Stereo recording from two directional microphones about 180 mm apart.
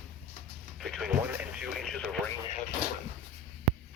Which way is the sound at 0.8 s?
Centre (ahead or behind).